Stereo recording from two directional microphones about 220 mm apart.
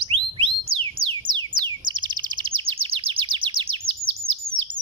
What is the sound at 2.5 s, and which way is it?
Chirp, 25° right (ahead or behind).